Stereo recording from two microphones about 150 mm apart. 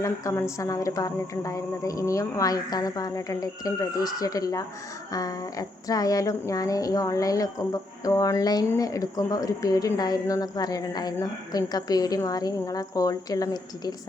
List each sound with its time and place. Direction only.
0.0 s speech: 20° left (ahead or behind)